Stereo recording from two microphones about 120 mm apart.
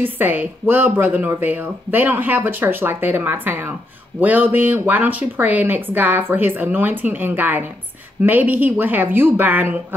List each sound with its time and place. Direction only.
0.0 s speech: 15° right (ahead or behind)